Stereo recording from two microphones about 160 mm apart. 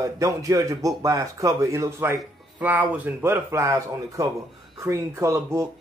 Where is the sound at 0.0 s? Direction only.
20° right (ahead or behind).